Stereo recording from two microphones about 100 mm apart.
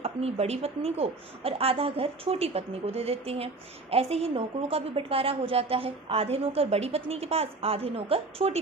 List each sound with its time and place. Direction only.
0.0 s a woman's voice: 90° right